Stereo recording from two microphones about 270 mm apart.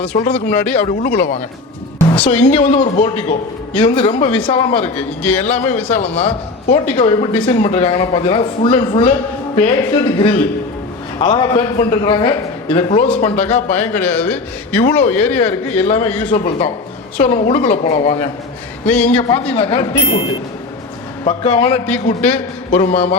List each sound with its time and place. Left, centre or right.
0.3 s a man's voice: centre
0.8 s a man's voice: left
2.1 s a woman's voice: centre
2.5 s a man's voice: centre
4.9 s a man's voice: centre
5.5 s a man's voice: left
13.9 s a man's voice: centre
14.8 s a man's voice: left
15.1 s a man's voice: centre
15.4 s a man's voice: left
18.9 s a man's voice: centre
19.5 s a man's voice: left
21.2 s a man's voice: centre